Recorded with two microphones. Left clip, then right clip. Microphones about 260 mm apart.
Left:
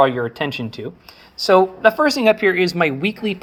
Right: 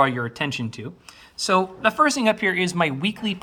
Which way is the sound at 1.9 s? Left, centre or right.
Right.